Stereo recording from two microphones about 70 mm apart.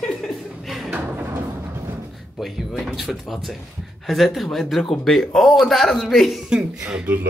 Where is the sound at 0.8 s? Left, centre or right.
Right.